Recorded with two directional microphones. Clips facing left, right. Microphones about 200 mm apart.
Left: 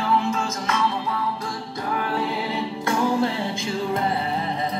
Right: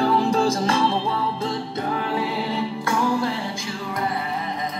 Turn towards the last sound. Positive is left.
turn(degrees=25)  # may be behind; listen again after turning